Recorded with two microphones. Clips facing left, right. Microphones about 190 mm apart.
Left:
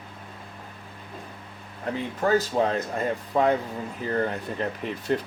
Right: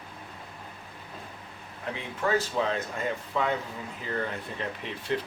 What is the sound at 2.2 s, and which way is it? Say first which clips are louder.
Speech: left 4 dB; 40° left (ahead or behind).